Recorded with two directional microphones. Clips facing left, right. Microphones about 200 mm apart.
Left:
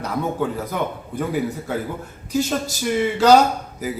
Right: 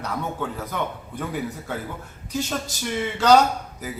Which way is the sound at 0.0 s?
10° left (ahead or behind).